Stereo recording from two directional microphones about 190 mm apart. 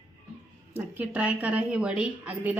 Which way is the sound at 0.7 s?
10° right (ahead or behind).